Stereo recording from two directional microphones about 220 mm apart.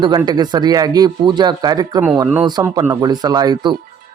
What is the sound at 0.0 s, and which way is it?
A man's voice, 20° right (ahead or behind).